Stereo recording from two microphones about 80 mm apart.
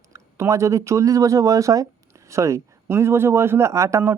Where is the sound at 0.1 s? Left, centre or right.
Right.